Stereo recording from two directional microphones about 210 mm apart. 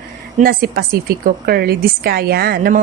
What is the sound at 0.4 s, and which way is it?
A woman's voice, 45° right (ahead or behind).